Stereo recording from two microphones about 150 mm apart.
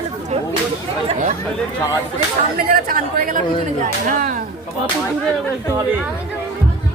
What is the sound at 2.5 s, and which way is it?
Speech, 75° right (ahead or behind).